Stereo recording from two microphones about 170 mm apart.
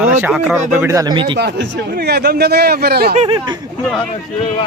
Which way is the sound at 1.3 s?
80° right.